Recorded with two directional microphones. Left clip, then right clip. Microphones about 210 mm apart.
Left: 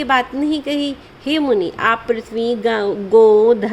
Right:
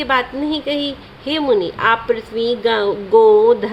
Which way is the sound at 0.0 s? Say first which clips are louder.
Left 1 dB; 25° left (ahead or behind).